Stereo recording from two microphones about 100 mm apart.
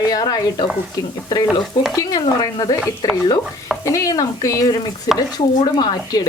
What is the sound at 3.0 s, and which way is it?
Speech, 35° left (ahead or behind).